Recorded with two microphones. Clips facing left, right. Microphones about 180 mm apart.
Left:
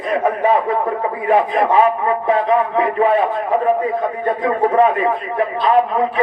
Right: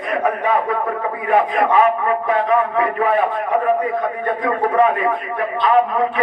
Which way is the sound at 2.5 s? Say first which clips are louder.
Left 1 dB; 30° left (ahead or behind).